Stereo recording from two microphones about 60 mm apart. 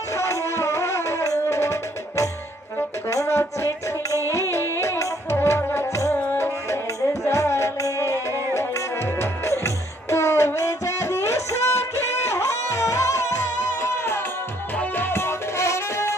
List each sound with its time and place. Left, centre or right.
0.1 s music: left
14.8 s music: left